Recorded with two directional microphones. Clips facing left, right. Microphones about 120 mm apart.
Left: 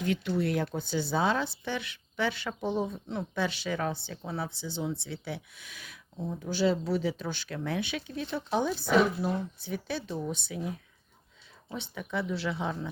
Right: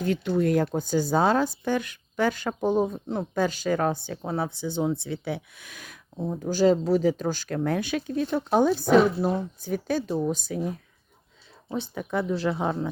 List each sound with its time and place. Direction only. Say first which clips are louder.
0.0 s speech: right 5 dB; 40° right (ahead or behind)
6.1 s speech: right 6 dB; 40° right (ahead or behind)